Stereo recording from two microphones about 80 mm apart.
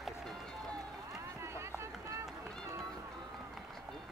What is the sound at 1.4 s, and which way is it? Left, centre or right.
Run, right.